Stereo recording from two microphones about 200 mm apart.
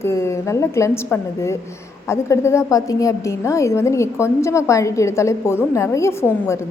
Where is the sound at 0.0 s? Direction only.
15° left (ahead or behind).